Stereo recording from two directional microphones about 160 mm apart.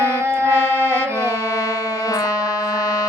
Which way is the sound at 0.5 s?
15° left (ahead or behind).